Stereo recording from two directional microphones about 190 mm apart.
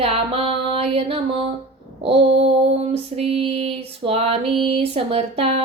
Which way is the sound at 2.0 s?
30° right (ahead or behind).